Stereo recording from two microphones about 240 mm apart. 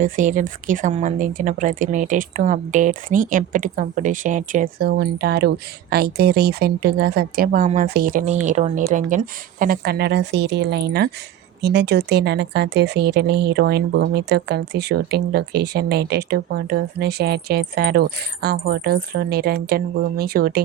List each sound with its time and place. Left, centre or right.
0.0 s a woman's voice: right